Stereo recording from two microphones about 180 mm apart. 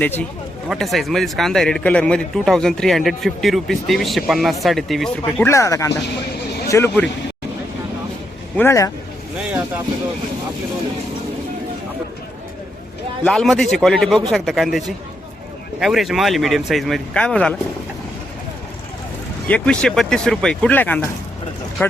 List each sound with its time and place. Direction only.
0.0 s a man's voice: 10° left (ahead or behind)
5.2 s speech: 15° left (ahead or behind)
8.5 s speech: 15° left (ahead or behind)
9.4 s vehicle: 10° right (ahead or behind)
13.2 s a man's voice: 5° left (ahead or behind)
19.5 s a man's voice: 5° left (ahead or behind)